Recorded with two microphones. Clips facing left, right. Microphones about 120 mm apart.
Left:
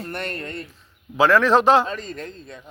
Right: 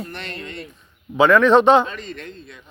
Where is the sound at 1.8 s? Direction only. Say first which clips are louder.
Left 2 dB; 40° left (ahead or behind).